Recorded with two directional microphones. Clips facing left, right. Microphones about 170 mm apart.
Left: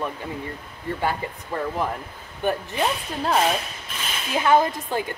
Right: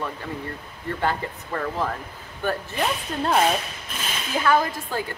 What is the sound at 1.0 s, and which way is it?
Speech, 10° left (ahead or behind).